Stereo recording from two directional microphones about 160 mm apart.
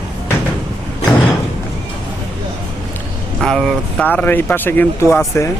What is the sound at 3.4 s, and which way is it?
Speech, centre (ahead or behind).